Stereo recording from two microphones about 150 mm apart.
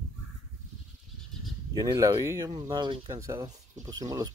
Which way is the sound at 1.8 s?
25° right (ahead or behind).